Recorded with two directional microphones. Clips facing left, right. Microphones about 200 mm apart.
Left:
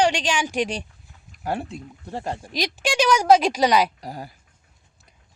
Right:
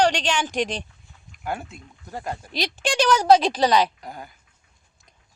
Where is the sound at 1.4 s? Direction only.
35° left (ahead or behind).